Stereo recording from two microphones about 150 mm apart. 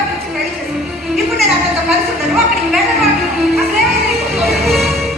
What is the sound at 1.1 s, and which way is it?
A woman's voice, centre (ahead or behind).